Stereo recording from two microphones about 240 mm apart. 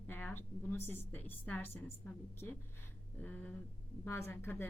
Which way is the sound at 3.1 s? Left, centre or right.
Centre.